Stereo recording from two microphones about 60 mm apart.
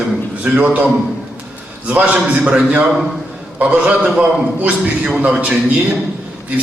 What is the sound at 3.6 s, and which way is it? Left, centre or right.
A man's voice, right.